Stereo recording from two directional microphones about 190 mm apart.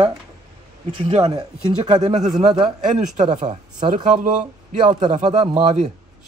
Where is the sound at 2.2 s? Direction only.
Centre (ahead or behind).